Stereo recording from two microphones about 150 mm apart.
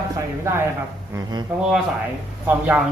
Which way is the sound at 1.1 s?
25° right (ahead or behind).